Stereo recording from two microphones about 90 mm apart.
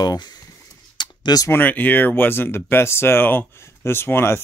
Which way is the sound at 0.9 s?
50° left (ahead or behind).